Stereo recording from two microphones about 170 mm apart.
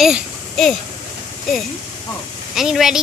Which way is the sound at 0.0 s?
Centre (ahead or behind).